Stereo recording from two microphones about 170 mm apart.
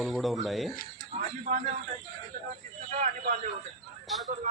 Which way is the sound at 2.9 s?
45° right (ahead or behind).